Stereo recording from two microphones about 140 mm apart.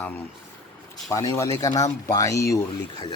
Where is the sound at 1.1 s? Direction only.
25° left (ahead or behind).